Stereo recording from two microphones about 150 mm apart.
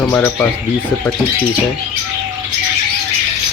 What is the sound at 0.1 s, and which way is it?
Speech, 15° left (ahead or behind).